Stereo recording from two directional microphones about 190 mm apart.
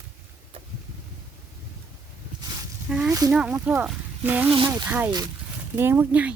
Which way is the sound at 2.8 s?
5° right (ahead or behind).